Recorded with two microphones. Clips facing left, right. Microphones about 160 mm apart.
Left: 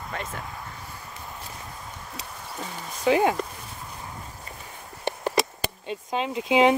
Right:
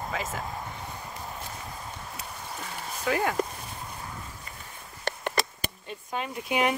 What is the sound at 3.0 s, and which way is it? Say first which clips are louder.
Speech: left 7 dB; 20° left (ahead or behind).